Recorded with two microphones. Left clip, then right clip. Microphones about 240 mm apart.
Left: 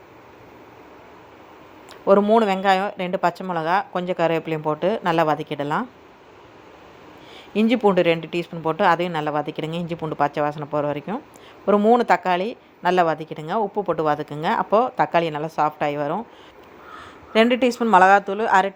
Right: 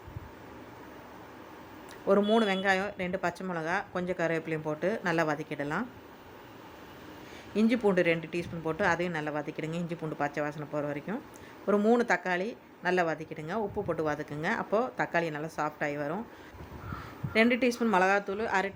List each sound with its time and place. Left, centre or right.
2.0 s a woman's voice: centre
7.5 s a woman's voice: centre
17.3 s a woman's voice: centre